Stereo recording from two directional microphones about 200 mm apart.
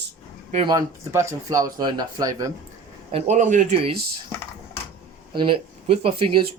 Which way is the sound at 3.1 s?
30° right (ahead or behind).